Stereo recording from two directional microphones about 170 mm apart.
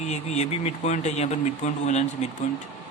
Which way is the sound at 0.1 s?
40° left (ahead or behind).